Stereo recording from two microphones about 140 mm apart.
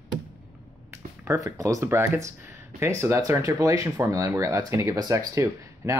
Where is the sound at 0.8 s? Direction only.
20° right (ahead or behind).